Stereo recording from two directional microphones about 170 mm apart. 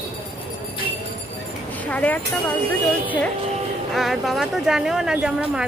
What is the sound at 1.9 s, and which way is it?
Speech, 10° left (ahead or behind).